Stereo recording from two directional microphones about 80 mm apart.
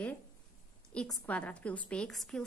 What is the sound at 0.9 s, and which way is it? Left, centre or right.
A woman's voice, centre.